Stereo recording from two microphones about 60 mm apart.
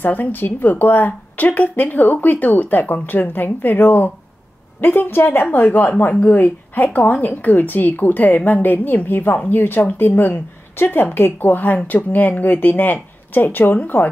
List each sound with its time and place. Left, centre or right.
0.0 s speech: left